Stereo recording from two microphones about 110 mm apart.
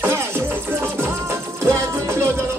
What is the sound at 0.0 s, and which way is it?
Music, 20° right (ahead or behind).